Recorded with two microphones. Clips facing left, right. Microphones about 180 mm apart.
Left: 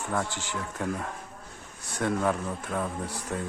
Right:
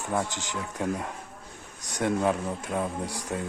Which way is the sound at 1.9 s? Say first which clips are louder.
Right 2 dB; 15° right (ahead or behind).